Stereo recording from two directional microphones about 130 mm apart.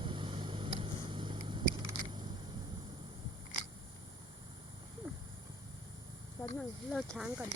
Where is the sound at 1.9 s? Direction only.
40° right (ahead or behind).